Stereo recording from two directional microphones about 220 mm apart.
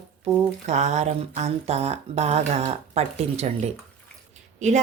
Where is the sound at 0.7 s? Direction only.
30° right (ahead or behind).